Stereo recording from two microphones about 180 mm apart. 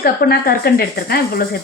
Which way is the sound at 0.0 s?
55° left (ahead or behind).